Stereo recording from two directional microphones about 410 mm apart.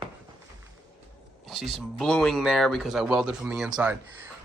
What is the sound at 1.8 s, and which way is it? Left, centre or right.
Speech, centre.